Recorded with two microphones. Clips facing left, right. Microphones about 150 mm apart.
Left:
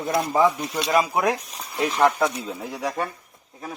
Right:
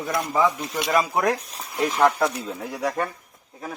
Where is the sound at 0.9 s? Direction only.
5° left (ahead or behind).